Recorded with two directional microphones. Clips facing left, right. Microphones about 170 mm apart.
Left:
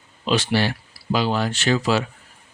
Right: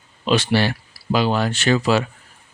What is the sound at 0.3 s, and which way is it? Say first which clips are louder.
Speech: right 2 dB; 65° right (ahead or behind).